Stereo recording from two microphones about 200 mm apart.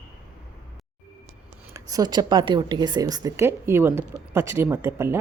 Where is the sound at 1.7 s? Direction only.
20° right (ahead or behind).